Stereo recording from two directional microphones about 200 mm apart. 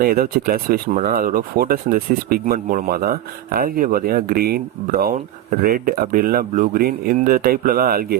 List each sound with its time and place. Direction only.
0.0 s speech: 45° right (ahead or behind)